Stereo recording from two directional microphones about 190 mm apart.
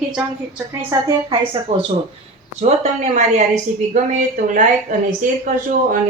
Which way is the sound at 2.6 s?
35° right (ahead or behind).